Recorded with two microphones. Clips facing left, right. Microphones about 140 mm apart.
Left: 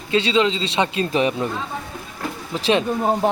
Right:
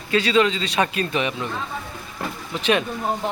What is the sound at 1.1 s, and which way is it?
Speech, 35° left (ahead or behind).